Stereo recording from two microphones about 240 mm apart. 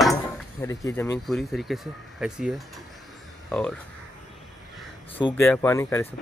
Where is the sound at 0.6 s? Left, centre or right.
Centre.